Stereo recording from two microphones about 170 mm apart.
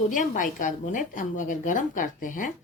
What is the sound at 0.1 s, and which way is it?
Speech, 50° left (ahead or behind).